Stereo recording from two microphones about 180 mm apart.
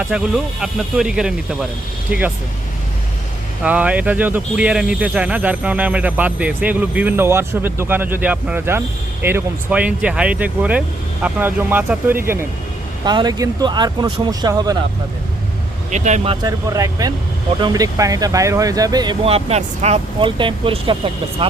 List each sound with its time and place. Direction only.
0.1 s speech: 5° right (ahead or behind)
3.6 s speech: 10° right (ahead or behind)
15.9 s speech: 40° right (ahead or behind)
16.5 s speech: 20° right (ahead or behind)
19.2 s speech: 35° right (ahead or behind)